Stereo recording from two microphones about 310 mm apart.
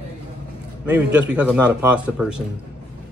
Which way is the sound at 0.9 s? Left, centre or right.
Centre.